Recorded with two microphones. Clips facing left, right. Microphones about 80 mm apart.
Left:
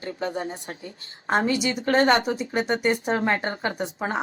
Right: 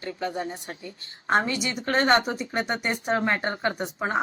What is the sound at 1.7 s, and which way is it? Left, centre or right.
Speech, left.